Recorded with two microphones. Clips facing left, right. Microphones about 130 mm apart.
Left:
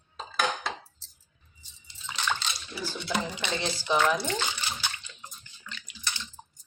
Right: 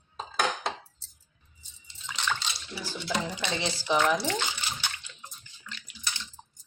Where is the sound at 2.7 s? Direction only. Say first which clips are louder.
Left 1 dB; centre (ahead or behind).